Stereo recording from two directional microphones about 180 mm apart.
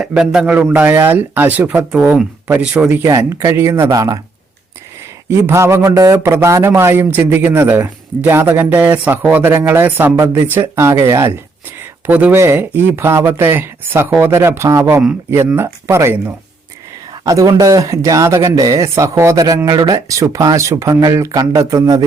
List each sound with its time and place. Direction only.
0.0 s speech: 5° right (ahead or behind); by 4.2 s 20° right (ahead or behind)
5.3 s speech: 15° right (ahead or behind)